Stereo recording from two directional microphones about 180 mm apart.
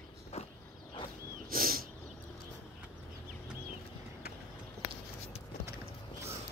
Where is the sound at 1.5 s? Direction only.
55° right (ahead or behind).